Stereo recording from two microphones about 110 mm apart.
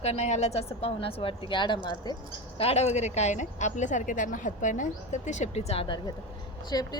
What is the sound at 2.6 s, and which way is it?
Speech, 75° left (ahead or behind).